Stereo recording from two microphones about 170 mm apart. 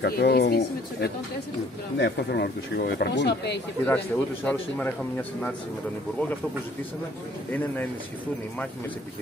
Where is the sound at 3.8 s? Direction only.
10° left (ahead or behind).